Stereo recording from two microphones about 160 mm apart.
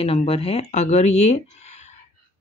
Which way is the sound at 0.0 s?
35° left (ahead or behind).